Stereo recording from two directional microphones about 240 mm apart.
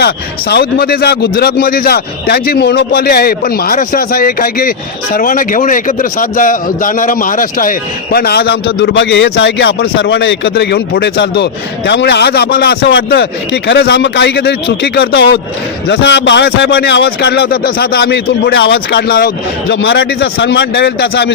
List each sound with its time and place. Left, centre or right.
0.0 s a man's voice: left